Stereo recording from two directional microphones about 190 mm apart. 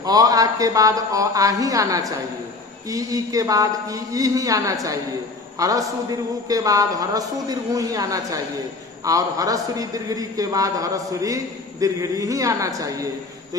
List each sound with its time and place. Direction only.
0.0 s a man's voice: 20° right (ahead or behind)